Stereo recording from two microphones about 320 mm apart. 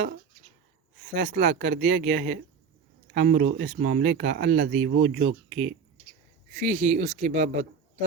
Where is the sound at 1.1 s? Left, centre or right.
Right.